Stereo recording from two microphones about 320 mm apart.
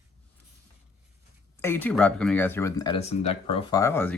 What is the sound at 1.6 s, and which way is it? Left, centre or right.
Speech, centre.